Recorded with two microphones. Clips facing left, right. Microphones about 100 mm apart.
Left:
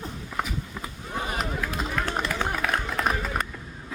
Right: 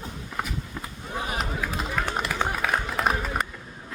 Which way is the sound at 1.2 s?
Centre (ahead or behind).